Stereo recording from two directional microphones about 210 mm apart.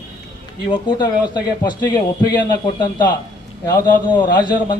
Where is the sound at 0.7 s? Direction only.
20° left (ahead or behind).